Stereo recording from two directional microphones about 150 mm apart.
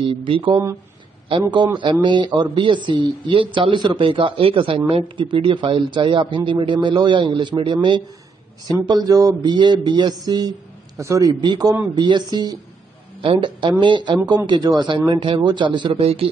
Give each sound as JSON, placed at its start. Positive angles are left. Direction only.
{"t": 0.0, "sound": "speech", "side_deg": -35}
{"t": 8.8, "sound": "a sound", "side_deg": -25}
{"t": 13.2, "sound": "speech", "side_deg": -35}